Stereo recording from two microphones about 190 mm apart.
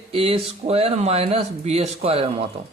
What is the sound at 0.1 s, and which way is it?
Speech, 30° right (ahead or behind).